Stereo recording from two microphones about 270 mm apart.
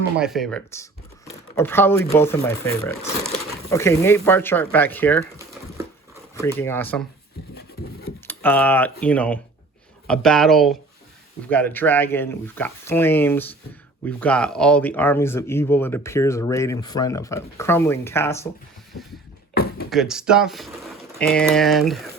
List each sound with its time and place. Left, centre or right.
0.2 s speech: centre
3.0 s speech: left
3.7 s speech: centre
6.3 s speech: centre
8.3 s speech: centre
19.9 s speech: centre